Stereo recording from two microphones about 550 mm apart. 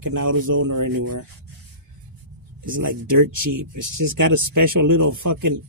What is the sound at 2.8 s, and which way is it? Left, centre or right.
Speech, right.